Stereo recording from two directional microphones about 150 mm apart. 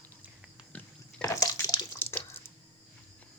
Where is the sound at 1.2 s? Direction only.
25° left (ahead or behind).